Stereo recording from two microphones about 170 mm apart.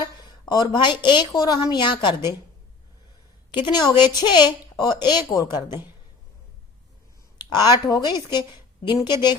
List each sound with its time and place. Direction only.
0.3 s a woman's voice: 25° left (ahead or behind)
3.5 s a woman's voice: 25° left (ahead or behind)
7.5 s a woman's voice: 25° left (ahead or behind)